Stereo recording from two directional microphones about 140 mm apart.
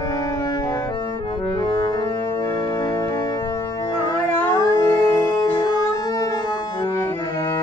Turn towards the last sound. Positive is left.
turn(degrees=30)  # may be behind; listen again after turning